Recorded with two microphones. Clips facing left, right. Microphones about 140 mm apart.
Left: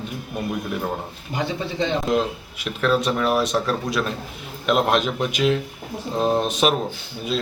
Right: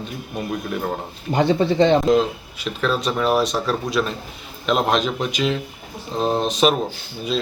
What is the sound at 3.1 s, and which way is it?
Speech, 5° right (ahead or behind).